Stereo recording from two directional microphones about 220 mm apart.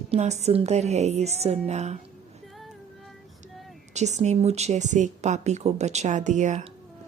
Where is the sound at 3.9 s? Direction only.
30° right (ahead or behind).